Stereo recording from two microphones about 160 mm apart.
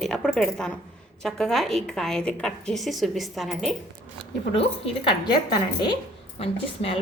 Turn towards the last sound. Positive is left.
turn(degrees=35)  # may be behind; listen again after turning